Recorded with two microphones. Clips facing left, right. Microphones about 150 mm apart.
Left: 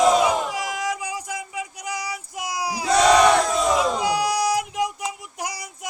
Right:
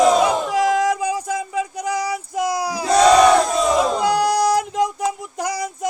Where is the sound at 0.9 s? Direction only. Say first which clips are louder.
Right 8 dB; 50° right (ahead or behind).